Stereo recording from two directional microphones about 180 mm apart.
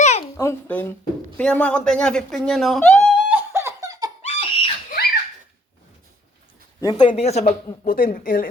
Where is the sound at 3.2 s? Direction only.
10° right (ahead or behind).